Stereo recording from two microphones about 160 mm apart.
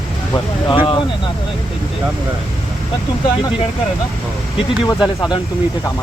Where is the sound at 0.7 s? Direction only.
30° left (ahead or behind).